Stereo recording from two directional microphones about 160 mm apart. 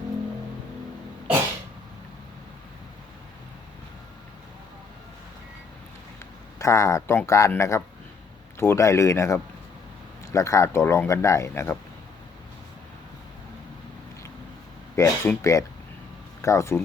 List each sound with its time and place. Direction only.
6.6 s speech: 20° left (ahead or behind)
14.9 s a sound: 20° left (ahead or behind)
15.3 s speech: 20° left (ahead or behind)